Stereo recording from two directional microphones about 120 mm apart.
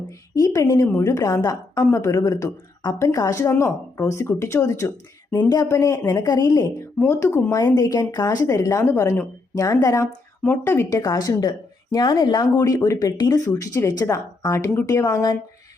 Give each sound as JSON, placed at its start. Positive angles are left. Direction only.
{"t": 0.3, "sound": "a woman's voice", "side_deg": 30}
{"t": 7.1, "sound": "a woman's voice", "side_deg": 20}
{"t": 7.8, "sound": "a woman's voice", "side_deg": 35}